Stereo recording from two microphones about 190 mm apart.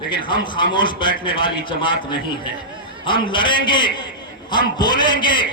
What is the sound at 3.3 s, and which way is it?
A man's voice, 25° left (ahead or behind).